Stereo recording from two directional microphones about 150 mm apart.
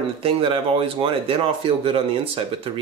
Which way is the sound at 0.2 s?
40° right (ahead or behind).